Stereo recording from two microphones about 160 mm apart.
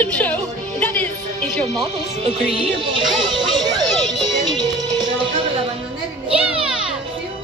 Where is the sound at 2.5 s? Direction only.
35° right (ahead or behind).